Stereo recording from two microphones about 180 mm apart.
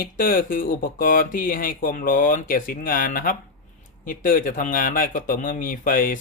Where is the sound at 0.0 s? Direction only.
50° left (ahead or behind).